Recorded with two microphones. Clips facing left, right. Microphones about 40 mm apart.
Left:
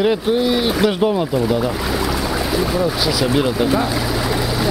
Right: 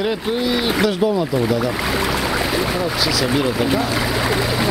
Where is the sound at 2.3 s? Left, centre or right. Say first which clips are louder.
Left 1 dB; right.